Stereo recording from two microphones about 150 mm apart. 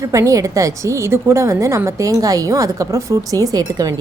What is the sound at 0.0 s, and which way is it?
A woman's voice, 20° right (ahead or behind).